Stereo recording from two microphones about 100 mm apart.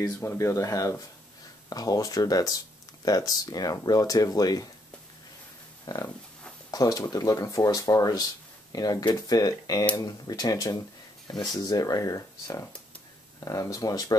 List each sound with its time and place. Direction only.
0.0 s speech: 25° left (ahead or behind)
5.9 s a sound: 35° left (ahead or behind)
6.7 s speech: 40° left (ahead or behind)